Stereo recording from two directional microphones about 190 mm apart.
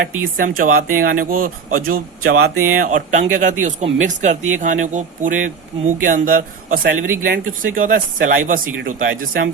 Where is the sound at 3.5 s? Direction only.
40° right (ahead or behind).